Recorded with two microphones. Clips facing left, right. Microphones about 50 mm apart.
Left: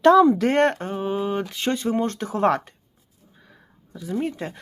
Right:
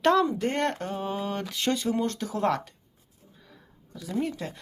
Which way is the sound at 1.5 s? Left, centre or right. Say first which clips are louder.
Even; left.